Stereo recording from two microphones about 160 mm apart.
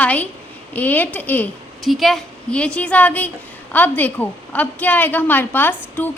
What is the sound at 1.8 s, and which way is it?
A woman's voice, centre (ahead or behind).